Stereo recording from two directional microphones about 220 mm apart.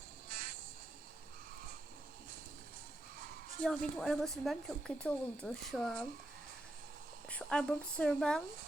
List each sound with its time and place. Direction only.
0.3 s insect: 40° right (ahead or behind)
3.6 s speech: centre (ahead or behind)
7.3 s speech: 5° left (ahead or behind)